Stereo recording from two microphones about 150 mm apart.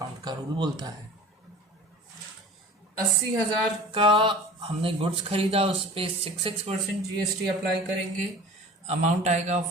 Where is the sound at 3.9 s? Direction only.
35° right (ahead or behind).